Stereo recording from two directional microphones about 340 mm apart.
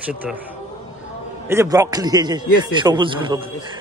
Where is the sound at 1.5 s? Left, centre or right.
Centre.